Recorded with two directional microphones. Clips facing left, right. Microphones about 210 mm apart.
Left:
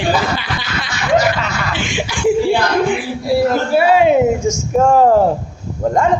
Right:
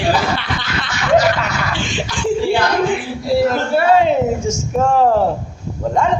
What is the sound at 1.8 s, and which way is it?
Speech, 10° left (ahead or behind).